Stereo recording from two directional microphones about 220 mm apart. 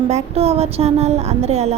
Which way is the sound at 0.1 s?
30° right (ahead or behind).